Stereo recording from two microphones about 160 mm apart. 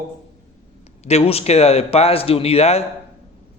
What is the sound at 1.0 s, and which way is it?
A man's voice, 40° left (ahead or behind).